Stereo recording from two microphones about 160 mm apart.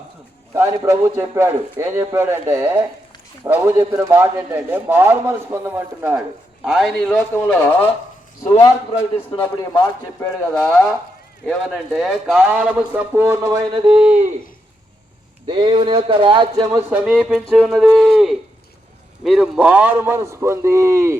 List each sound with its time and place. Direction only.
0.5 s a man's voice: 20° right (ahead or behind)
6.7 s speech: centre (ahead or behind)
7.3 s speech: 10° left (ahead or behind)
10.2 s speech: 10° left (ahead or behind)
11.9 s a man's voice: centre (ahead or behind); by 13.8 s 20° right (ahead or behind)
13.8 s a man's voice: 5° right (ahead or behind)
15.4 s speech: 30° right (ahead or behind)
16.9 s a man's voice: 5° right (ahead or behind)